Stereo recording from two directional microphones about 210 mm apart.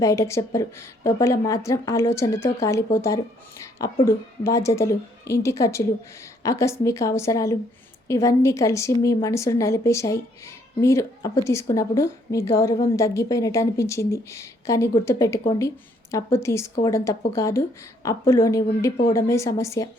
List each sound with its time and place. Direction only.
0.0 s speech: 15° left (ahead or behind)